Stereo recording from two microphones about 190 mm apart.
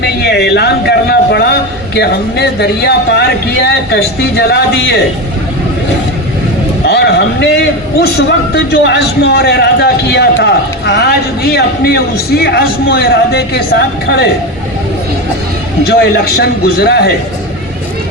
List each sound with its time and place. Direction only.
0.0 s a man's voice: 60° left (ahead or behind)
6.8 s a man's voice: 60° left (ahead or behind)
15.9 s a man's voice: 55° left (ahead or behind)